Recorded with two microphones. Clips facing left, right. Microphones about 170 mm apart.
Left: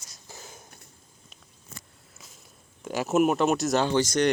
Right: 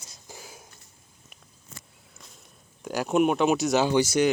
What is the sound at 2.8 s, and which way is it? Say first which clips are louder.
Speech: even; centre (ahead or behind).